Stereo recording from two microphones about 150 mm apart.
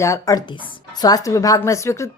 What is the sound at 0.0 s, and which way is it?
A woman's voice, 20° left (ahead or behind).